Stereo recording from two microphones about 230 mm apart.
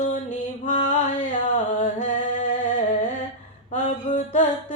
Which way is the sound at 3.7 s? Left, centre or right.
Left.